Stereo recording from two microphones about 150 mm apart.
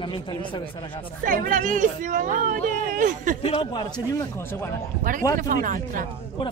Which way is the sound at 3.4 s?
35° left (ahead or behind).